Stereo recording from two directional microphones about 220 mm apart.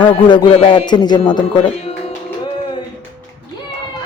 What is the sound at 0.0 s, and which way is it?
A man's voice, 20° left (ahead or behind).